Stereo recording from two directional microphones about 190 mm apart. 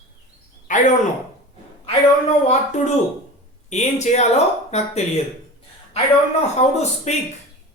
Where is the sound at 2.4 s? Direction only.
40° left (ahead or behind).